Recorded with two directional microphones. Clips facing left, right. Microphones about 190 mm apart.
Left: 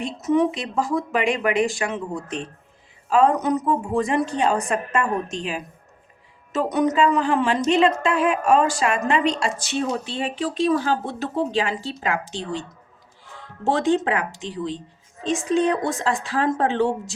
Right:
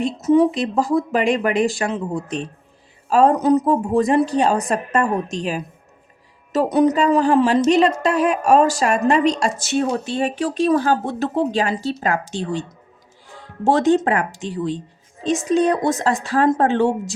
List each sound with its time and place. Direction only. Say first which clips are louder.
0.0 s a woman's voice: right 5 dB; 35° right (ahead or behind)
13.7 s a woman's voice: right 4 dB; 45° right (ahead or behind)